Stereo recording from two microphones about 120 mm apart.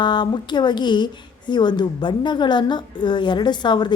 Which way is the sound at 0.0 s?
40° left (ahead or behind).